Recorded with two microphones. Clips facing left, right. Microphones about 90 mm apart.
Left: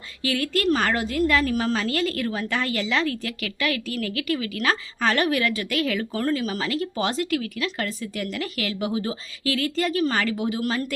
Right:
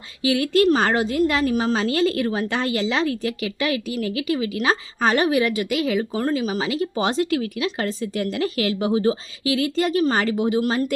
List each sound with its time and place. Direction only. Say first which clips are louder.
0.2 s a woman's voice: right 7 dB; 20° right (ahead or behind)
9.4 s a woman's voice: right 2 dB; 20° right (ahead or behind)